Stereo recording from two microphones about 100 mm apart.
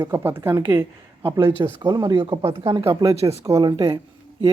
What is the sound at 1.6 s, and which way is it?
Speech, 50° right (ahead or behind).